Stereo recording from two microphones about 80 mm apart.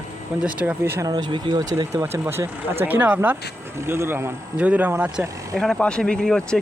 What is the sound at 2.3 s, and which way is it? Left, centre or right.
Speech, right.